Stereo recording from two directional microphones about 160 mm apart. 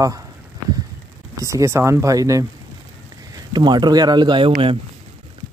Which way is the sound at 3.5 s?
25° right (ahead or behind).